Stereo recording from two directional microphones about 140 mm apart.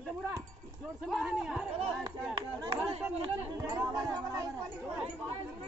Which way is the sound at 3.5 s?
30° right (ahead or behind).